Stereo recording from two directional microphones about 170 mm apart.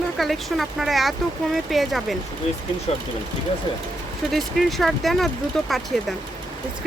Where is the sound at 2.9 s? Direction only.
35° left (ahead or behind).